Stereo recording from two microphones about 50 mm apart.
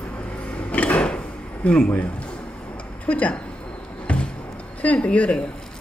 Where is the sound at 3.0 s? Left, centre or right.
Left.